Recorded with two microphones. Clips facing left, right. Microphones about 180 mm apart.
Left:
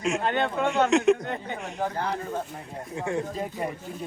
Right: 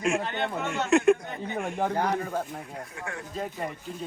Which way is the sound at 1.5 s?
55° right (ahead or behind).